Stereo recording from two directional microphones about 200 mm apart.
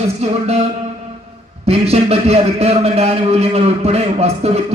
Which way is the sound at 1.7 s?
30° right (ahead or behind).